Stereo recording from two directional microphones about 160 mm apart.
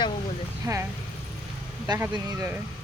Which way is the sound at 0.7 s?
20° right (ahead or behind).